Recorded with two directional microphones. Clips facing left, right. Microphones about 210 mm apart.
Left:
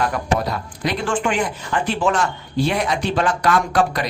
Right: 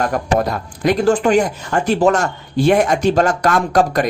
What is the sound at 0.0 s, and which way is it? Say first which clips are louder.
Speech: right 4 dB; 45° right (ahead or behind).